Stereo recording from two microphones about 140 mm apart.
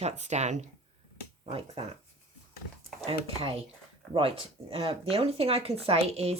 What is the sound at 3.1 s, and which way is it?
Speech, 40° right (ahead or behind).